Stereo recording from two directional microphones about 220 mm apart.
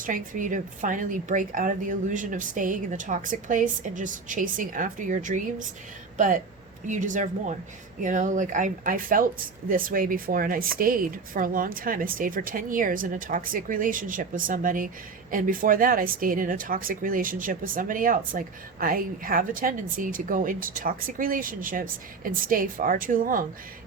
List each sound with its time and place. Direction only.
0.0 s speech: 35° right (ahead or behind)